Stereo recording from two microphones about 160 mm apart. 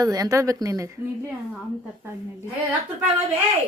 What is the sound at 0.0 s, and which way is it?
Speech, 20° right (ahead or behind).